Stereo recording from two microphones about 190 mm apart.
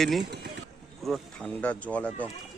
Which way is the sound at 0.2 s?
60° right (ahead or behind).